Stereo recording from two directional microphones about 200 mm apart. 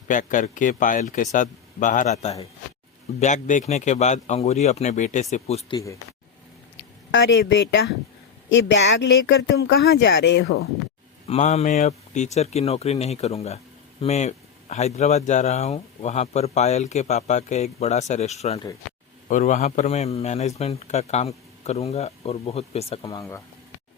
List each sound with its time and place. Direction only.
0.1 s speech: 40° left (ahead or behind)
7.1 s speech: 60° left (ahead or behind)
11.3 s speech: 35° left (ahead or behind)